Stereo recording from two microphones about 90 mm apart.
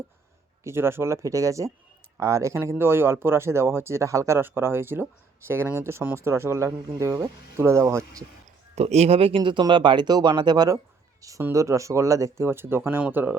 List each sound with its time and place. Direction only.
0.6 s speech: 30° right (ahead or behind)
9.1 s speech: 90° right; by 10.8 s 50° right (ahead or behind)
11.2 s speech: 40° right (ahead or behind); by 13.3 s 20° right (ahead or behind)